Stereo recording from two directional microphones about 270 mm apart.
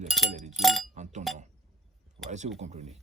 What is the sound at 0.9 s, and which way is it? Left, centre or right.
Speech, right.